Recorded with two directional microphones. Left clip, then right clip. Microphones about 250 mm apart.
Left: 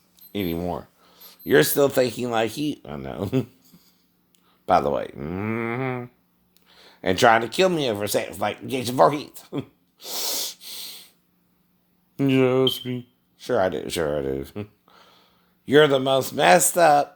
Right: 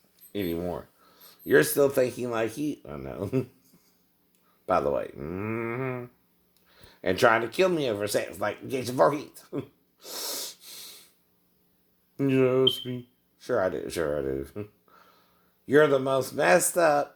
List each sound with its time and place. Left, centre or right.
0.3 s speech: left
4.6 s speech: left
12.1 s speech: left